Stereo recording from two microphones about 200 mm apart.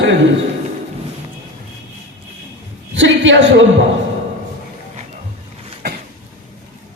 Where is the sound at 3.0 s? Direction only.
65° right (ahead or behind).